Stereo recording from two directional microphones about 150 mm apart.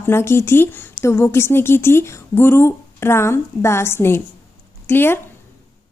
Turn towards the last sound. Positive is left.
turn(degrees=15)  # may be behind; listen again after turning